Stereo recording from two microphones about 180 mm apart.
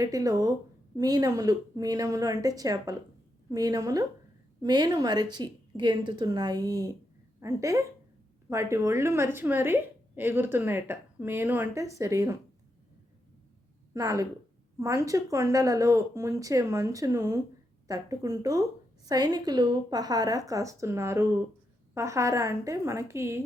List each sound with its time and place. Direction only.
0.0 s a woman's voice: 20° right (ahead or behind)
13.9 s a woman's voice: 20° right (ahead or behind)